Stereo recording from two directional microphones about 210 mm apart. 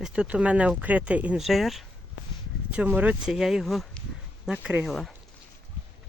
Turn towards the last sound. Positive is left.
turn(degrees=0)  # may be behind; listen again after turning